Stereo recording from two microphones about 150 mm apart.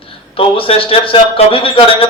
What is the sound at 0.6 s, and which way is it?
A man's voice, 40° left (ahead or behind).